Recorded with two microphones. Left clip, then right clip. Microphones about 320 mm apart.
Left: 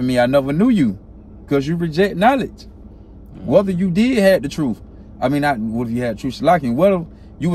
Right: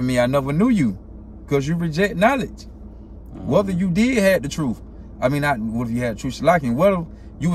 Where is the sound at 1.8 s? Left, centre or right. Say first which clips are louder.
Left 2 dB; centre.